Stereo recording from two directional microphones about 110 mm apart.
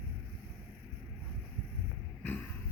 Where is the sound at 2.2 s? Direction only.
15° left (ahead or behind).